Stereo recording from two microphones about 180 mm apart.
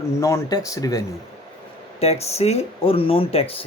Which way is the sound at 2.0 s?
35° left (ahead or behind).